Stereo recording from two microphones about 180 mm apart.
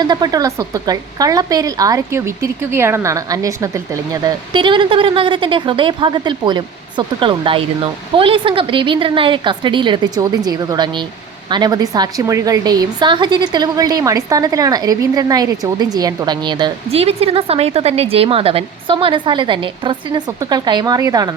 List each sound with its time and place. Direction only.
0.0 s speech: 20° right (ahead or behind)